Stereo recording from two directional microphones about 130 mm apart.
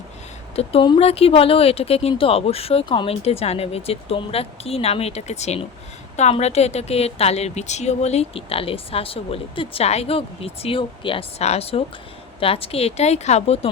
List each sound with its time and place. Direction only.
0.5 s a woman's voice: 50° left (ahead or behind)